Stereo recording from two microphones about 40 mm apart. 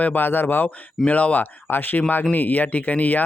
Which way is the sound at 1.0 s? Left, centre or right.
Left.